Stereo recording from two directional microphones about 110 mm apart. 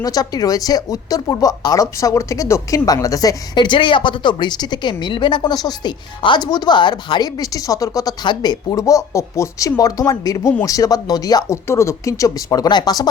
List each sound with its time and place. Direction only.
0.0 s speech: 35° left (ahead or behind)